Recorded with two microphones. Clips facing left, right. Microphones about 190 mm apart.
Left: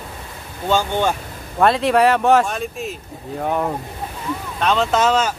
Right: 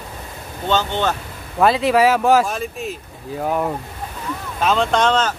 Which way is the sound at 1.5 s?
Centre (ahead or behind).